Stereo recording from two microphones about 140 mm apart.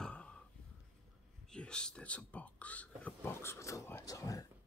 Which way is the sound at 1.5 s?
5° left (ahead or behind).